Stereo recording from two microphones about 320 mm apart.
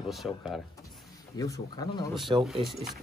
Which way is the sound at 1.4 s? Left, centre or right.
Centre.